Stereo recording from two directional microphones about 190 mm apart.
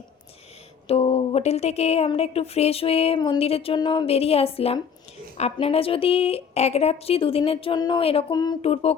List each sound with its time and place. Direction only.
0.9 s a woman's voice: 30° left (ahead or behind)
8.6 s speech: 30° left (ahead or behind)